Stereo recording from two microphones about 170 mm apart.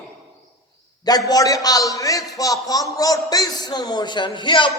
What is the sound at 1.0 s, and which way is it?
A man's voice, 20° left (ahead or behind).